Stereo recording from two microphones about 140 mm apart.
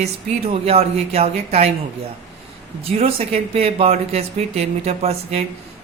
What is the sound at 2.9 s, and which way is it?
Speech, 45° right (ahead or behind).